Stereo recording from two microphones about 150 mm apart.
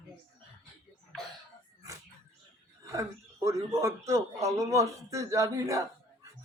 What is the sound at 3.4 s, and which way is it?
A woman's voice, 20° right (ahead or behind).